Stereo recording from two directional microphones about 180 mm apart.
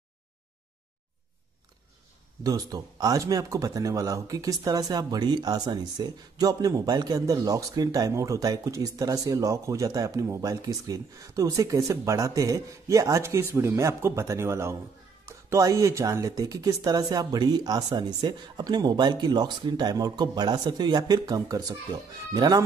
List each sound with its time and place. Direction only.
2.4 s speech: 20° right (ahead or behind)